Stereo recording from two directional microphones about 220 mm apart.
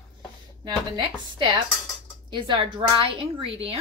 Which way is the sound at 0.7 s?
20° right (ahead or behind).